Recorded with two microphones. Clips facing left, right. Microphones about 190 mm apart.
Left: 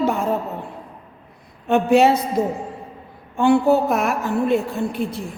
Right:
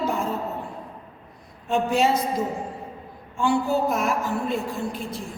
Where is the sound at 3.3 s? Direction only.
60° left (ahead or behind).